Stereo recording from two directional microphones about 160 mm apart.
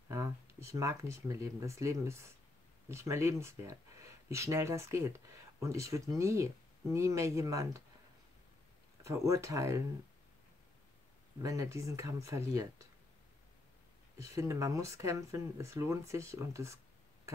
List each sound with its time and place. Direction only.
0.1 s speech: 20° right (ahead or behind)
9.0 s speech: 20° right (ahead or behind)
11.4 s speech: 20° right (ahead or behind)
14.1 s speech: 20° right (ahead or behind)